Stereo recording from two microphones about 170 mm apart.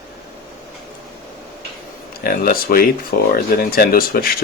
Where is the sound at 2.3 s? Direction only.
60° left (ahead or behind).